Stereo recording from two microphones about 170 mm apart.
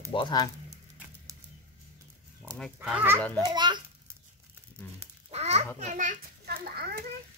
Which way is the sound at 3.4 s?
25° right (ahead or behind).